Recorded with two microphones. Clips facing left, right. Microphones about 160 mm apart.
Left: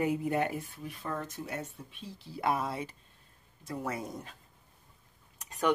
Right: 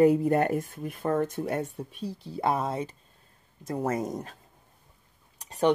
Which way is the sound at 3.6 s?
45° right (ahead or behind).